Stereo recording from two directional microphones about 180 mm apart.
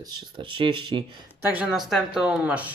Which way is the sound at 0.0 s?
25° right (ahead or behind).